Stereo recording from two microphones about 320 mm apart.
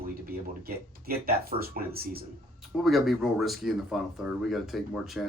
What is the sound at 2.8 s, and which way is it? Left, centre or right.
Speech, centre.